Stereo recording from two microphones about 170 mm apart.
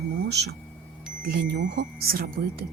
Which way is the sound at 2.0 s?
60° right (ahead or behind).